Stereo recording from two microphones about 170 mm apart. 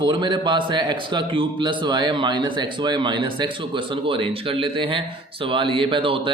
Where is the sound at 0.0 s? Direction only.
25° right (ahead or behind).